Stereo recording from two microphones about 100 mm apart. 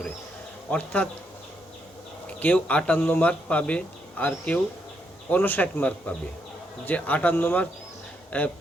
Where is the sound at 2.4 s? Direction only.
15° left (ahead or behind).